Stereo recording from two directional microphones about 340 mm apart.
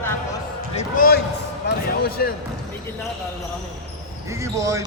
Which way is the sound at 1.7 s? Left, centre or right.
Left.